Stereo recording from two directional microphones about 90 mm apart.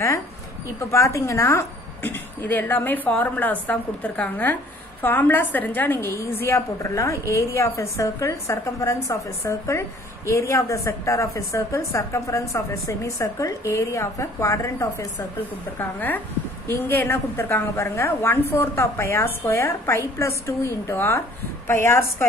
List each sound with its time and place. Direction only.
0.9 s a woman's voice: 35° left (ahead or behind)
15.8 s a woman's voice: 20° left (ahead or behind)